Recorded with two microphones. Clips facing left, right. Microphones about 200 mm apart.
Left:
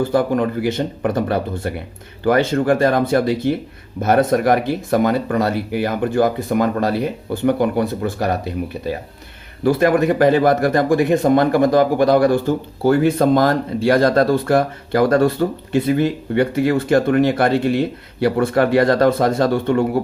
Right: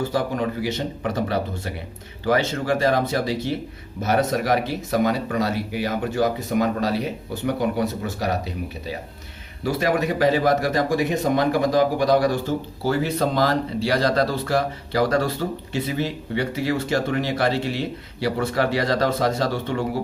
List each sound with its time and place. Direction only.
0.1 s a man's voice: 55° left (ahead or behind)